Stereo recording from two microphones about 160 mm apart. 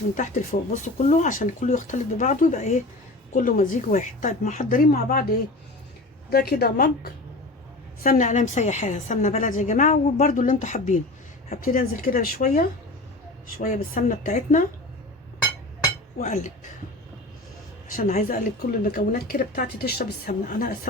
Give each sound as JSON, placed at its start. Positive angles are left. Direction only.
{"t": 0.1, "sound": "a woman's voice", "side_deg": 50}
{"t": 6.3, "sound": "a woman's voice", "side_deg": 75}
{"t": 8.0, "sound": "a woman's voice", "side_deg": 50}
{"t": 16.2, "sound": "a woman's voice", "side_deg": 50}
{"t": 17.9, "sound": "a woman's voice", "side_deg": 60}
{"t": 18.8, "sound": "a woman's voice", "side_deg": 70}